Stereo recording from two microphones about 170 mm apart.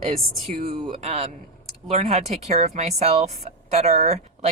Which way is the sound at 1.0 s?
40° right (ahead or behind).